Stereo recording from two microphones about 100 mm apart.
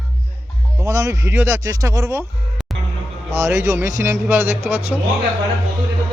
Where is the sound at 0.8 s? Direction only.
30° right (ahead or behind).